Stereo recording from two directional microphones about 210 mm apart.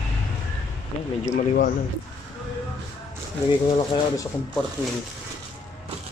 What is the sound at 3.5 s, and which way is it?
Speech, 20° left (ahead or behind).